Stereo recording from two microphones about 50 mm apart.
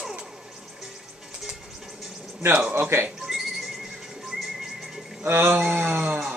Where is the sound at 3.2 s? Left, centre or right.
Centre.